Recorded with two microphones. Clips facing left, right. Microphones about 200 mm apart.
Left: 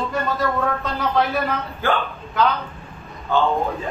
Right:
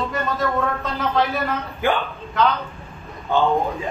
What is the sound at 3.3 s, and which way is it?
Speech, 15° right (ahead or behind).